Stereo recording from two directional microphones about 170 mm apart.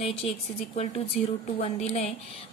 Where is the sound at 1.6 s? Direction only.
35° left (ahead or behind).